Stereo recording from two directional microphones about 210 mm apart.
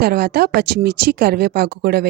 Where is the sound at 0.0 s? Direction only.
50° right (ahead or behind).